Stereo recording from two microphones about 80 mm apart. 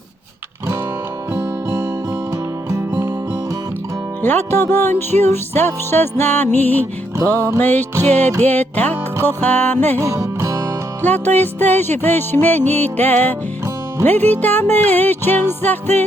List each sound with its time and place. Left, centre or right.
2.6 s music: right
4.2 s music: left
10.0 s music: right
11.0 s music: left